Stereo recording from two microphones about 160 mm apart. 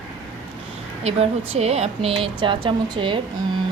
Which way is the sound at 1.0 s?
40° right (ahead or behind).